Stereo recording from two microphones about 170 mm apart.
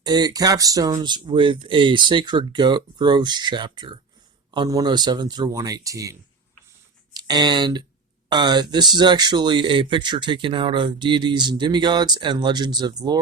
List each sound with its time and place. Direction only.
0.0 s speech: 25° right (ahead or behind)